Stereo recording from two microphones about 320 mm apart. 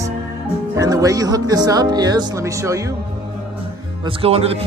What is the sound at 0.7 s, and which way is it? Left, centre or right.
Speech, centre.